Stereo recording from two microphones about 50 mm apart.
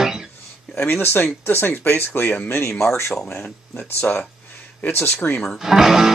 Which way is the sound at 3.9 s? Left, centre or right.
Left.